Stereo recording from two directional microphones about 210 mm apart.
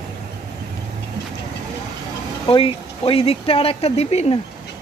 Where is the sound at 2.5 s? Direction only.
25° left (ahead or behind).